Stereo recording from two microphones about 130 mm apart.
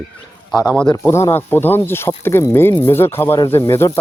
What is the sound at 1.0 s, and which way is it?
Speech, 20° left (ahead or behind).